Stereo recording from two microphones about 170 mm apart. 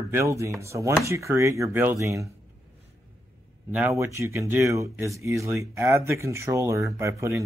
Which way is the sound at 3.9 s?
15° right (ahead or behind).